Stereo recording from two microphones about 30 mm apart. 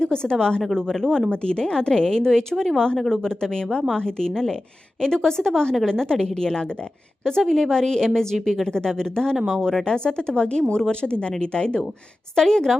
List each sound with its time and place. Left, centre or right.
0.0 s a woman's voice: left
1.3 s a woman's voice: left
7.4 s a woman's voice: centre
7.7 s a woman's voice: centre
9.8 s a woman's voice: left